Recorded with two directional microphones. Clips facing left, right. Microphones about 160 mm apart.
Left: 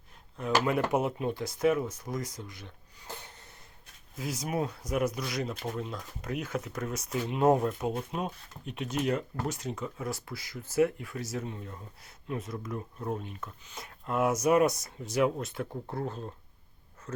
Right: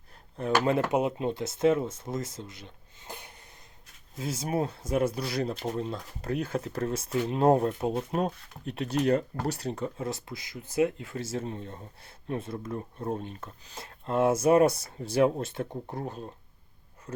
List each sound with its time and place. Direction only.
0.3 s speech: 35° right (ahead or behind)
0.8 s speech: 20° right (ahead or behind)
4.2 s speech: 25° right (ahead or behind)
10.1 s speech: 20° right (ahead or behind)
15.9 s speech: 15° right (ahead or behind)